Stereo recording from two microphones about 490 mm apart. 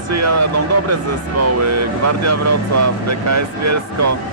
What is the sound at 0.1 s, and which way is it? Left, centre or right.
Speech, right.